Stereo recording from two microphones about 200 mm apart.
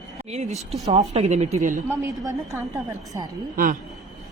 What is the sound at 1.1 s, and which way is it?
Speech, 35° right (ahead or behind).